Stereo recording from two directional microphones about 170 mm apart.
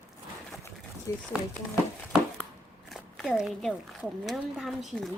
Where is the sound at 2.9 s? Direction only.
Centre (ahead or behind).